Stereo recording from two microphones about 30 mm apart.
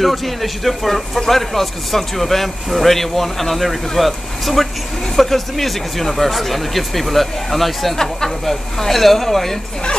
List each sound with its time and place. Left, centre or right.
0.0 s speech: centre
7.9 s speech: centre